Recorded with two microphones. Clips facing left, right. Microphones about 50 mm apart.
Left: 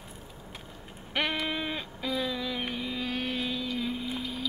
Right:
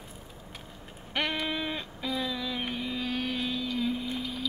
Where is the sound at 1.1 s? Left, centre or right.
Centre.